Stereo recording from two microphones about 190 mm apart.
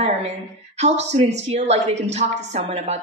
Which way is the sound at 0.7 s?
35° right (ahead or behind).